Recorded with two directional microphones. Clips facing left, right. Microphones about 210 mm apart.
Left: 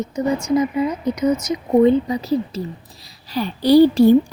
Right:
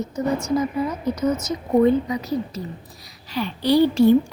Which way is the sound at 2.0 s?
30° left (ahead or behind).